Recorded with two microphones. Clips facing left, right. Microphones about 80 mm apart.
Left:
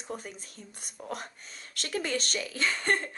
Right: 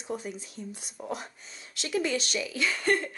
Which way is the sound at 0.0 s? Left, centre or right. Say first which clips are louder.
Right 4 dB; left.